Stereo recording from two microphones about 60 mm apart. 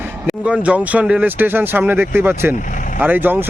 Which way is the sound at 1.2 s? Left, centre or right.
Right.